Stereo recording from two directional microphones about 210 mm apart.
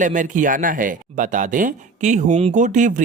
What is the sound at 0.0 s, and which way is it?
Speech, 35° right (ahead or behind).